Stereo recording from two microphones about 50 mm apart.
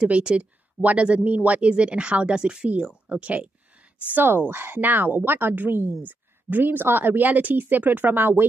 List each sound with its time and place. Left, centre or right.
0.0 s speech: right
2.9 s a sound: right
4.1 s a woman's voice: right